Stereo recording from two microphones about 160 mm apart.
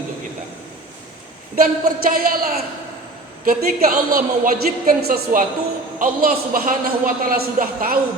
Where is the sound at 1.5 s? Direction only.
65° right (ahead or behind).